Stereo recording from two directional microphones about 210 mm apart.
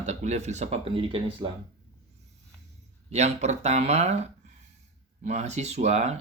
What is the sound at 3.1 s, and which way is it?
Speech, 30° right (ahead or behind).